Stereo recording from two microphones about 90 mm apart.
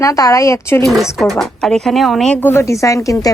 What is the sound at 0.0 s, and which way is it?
Speech, 40° left (ahead or behind).